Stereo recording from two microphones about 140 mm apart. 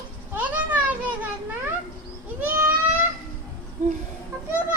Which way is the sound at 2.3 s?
15° right (ahead or behind).